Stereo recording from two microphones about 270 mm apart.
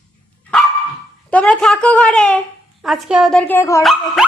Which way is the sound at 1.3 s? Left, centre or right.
Centre.